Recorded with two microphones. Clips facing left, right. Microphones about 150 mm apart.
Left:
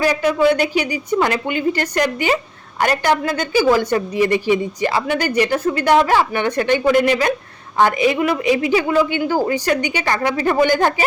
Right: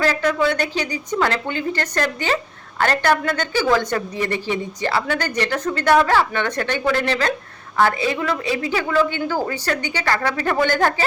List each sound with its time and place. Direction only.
0.0 s a woman's voice: 10° left (ahead or behind)